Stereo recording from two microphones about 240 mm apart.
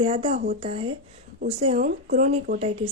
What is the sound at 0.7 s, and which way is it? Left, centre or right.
A woman's voice, right.